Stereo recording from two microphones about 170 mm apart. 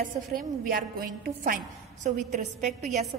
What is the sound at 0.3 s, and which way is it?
A woman's voice, 60° right (ahead or behind).